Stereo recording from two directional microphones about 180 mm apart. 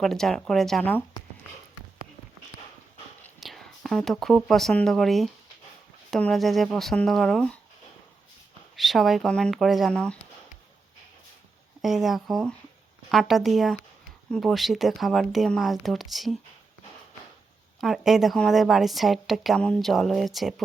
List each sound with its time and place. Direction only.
0.0 s a woman's voice: centre (ahead or behind)
3.4 s a woman's voice: centre (ahead or behind)
8.7 s a woman's voice: centre (ahead or behind)
11.8 s a woman's voice: centre (ahead or behind)
17.7 s a woman's voice: centre (ahead or behind)